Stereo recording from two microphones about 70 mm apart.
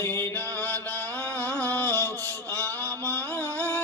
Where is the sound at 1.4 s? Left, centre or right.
Left.